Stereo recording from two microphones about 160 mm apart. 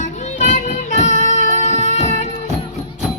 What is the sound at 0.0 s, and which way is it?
Music, 45° left (ahead or behind).